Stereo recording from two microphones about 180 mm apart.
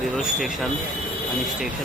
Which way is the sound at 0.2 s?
Centre (ahead or behind).